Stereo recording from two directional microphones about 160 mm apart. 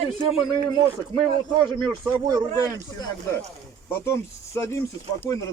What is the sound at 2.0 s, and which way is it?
Speech, 15° right (ahead or behind).